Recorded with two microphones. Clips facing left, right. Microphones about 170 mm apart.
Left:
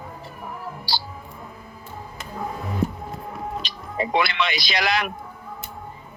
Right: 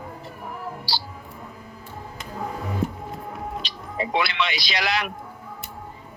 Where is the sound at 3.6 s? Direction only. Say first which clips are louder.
Left 2 dB; 50° left (ahead or behind).